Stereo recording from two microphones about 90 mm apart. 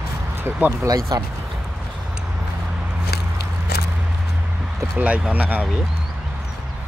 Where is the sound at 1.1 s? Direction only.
45° right (ahead or behind).